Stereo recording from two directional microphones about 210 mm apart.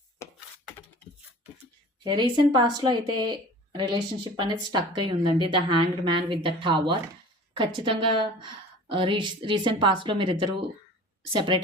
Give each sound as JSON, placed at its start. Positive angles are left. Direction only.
{"t": 2.0, "sound": "a woman's voice", "side_deg": -20}